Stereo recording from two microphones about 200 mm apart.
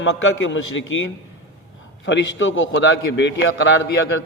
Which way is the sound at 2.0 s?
65° left (ahead or behind).